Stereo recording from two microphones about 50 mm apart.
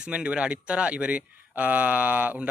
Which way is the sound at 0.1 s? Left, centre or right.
Right.